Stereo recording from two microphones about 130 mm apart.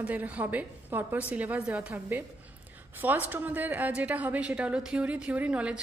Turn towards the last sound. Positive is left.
turn(degrees=-10)  # may be behind; listen again after turning